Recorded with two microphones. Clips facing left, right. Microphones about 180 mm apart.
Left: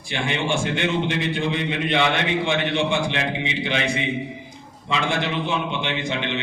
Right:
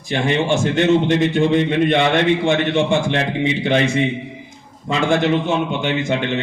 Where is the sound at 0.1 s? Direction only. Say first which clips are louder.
Right 6 dB; 40° right (ahead or behind).